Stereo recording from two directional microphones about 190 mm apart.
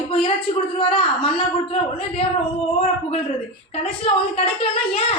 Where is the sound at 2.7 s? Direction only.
30° left (ahead or behind).